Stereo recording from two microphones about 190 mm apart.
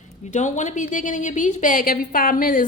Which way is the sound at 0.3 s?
40° left (ahead or behind).